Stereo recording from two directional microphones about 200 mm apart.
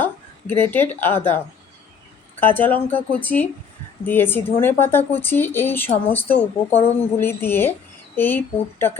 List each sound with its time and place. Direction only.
0.0 s speech: 10° left (ahead or behind)
2.4 s speech: 10° left (ahead or behind)
6.3 s speech: 30° left (ahead or behind)
7.2 s a woman's voice: 10° left (ahead or behind)